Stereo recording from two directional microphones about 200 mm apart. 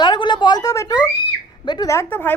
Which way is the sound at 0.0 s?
20° left (ahead or behind).